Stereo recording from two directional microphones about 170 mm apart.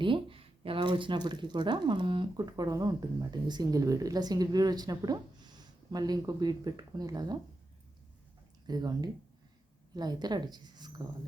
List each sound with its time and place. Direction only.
0.0 s speech: 30° right (ahead or behind)
8.6 s speech: 25° right (ahead or behind)